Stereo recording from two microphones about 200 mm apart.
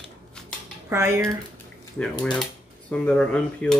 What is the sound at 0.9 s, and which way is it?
Speech, 10° right (ahead or behind).